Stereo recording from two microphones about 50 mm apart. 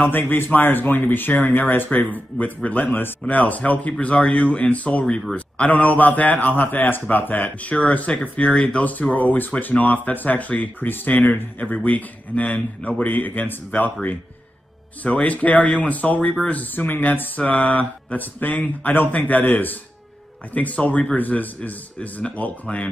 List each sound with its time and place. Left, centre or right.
0.1 s a man's voice: left
15.1 s a man's voice: left